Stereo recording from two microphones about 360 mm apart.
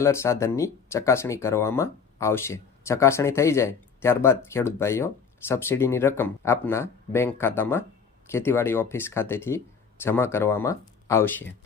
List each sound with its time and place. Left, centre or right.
0.0 s speech: centre